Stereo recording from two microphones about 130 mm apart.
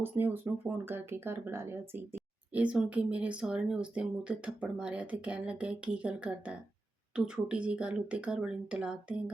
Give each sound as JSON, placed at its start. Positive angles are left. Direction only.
{"t": 0.0, "sound": "speech", "side_deg": -15}